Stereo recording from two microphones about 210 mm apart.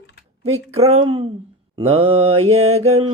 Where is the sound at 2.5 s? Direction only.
30° right (ahead or behind).